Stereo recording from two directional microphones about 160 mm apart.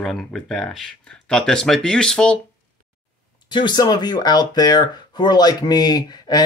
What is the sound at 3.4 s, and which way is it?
Speech, 30° left (ahead or behind).